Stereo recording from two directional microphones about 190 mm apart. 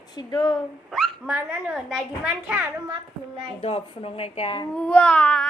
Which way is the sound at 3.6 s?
30° left (ahead or behind).